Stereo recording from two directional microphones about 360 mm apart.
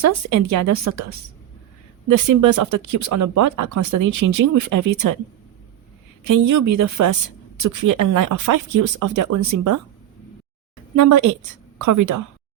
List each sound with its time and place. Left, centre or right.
0.0 s speech: right
2.0 s speech: right
6.2 s speech: right
10.9 s speech: right